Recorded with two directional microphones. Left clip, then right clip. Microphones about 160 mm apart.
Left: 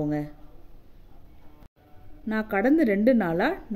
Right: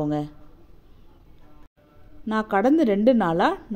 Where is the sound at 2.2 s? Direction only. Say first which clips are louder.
Right 4 dB; 15° right (ahead or behind).